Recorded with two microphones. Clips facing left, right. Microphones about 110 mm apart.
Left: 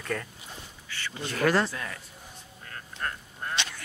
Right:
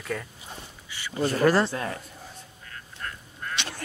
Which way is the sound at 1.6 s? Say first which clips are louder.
Right 6 dB; 35° right (ahead or behind).